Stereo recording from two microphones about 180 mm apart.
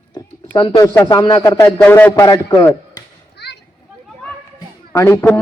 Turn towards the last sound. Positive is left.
turn(degrees=15)  # may be behind; listen again after turning